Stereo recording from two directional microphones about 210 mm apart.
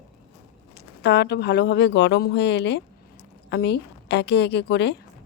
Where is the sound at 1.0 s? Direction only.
50° left (ahead or behind).